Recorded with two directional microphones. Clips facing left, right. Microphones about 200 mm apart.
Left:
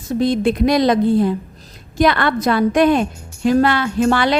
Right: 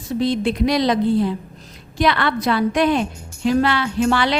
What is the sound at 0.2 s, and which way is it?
A woman's voice, 50° left (ahead or behind).